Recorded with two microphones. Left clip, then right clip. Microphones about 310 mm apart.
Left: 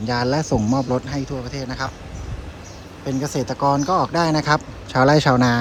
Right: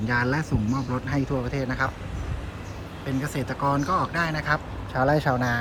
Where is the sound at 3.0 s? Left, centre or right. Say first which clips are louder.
Left 6 dB; centre.